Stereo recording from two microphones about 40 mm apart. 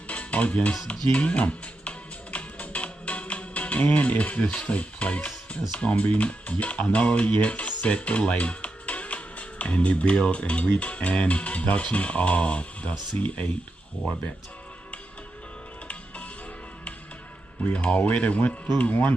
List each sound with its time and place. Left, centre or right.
0.1 s music: left
5.8 s speech: left
17.6 s speech: left